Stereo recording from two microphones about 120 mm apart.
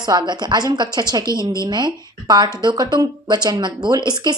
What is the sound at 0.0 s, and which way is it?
A woman's voice, 35° right (ahead or behind).